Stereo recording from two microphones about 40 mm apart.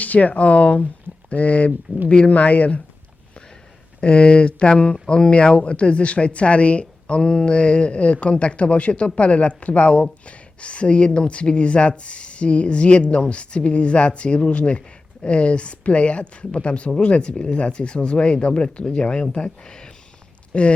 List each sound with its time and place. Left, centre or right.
0.0 s speech: left
4.0 s speech: left